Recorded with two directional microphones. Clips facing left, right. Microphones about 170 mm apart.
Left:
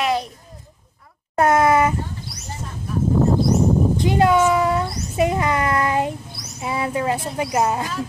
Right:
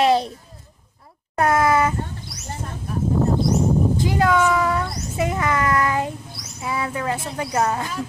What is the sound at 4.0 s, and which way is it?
A child's voice, 20° left (ahead or behind).